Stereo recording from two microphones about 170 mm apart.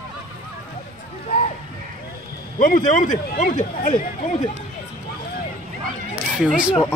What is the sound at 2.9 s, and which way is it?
Speech, 50° left (ahead or behind).